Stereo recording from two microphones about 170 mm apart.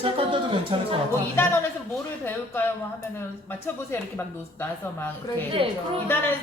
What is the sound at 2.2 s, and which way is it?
Speech, 10° left (ahead or behind).